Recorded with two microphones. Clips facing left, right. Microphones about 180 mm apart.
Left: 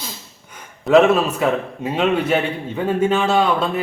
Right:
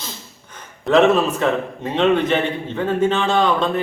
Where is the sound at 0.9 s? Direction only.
5° left (ahead or behind).